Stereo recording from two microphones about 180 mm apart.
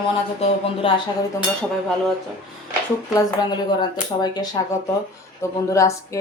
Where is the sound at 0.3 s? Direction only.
35° left (ahead or behind).